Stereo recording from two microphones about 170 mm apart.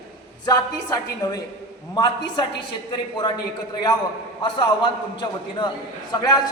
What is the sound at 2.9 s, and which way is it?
Speech, 25° left (ahead or behind).